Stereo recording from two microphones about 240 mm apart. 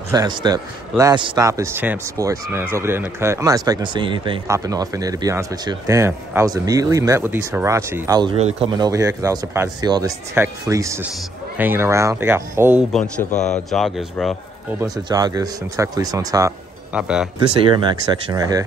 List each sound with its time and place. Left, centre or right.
0.1 s a man's voice: centre
13.3 s a man's voice: left
13.7 s speech: centre
15.0 s a man's voice: centre
17.6 s a man's voice: centre